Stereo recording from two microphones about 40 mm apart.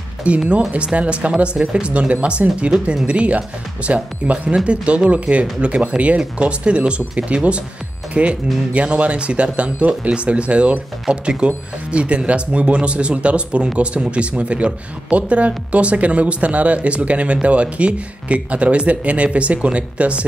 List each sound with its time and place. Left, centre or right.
0.2 s speech: right